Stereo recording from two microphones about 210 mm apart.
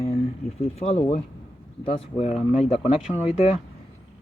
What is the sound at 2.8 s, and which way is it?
Speech, 5° right (ahead or behind).